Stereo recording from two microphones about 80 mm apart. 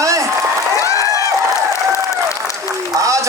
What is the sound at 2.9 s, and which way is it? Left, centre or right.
Speech, right.